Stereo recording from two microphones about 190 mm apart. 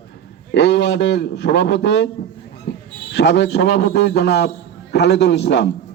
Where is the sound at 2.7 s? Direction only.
65° left (ahead or behind).